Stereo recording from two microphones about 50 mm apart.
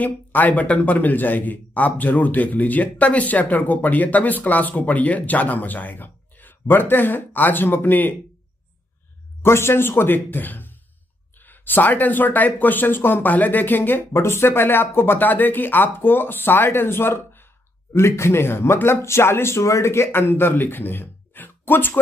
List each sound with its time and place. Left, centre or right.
0.0 s a man's voice: left
9.4 s a man's voice: left
14.2 s speech: left
17.9 s speech: left